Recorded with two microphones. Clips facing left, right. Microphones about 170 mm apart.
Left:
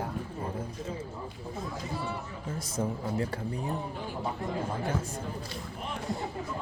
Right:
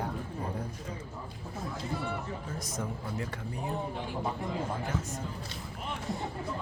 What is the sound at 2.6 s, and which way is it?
Speech, 30° left (ahead or behind).